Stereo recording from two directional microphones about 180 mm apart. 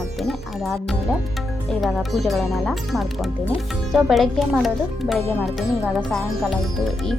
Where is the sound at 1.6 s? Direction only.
Centre (ahead or behind).